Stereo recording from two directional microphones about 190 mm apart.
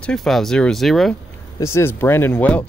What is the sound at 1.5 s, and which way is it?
Speech, 15° left (ahead or behind).